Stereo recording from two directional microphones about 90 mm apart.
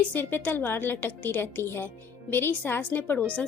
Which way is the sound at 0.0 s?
20° left (ahead or behind).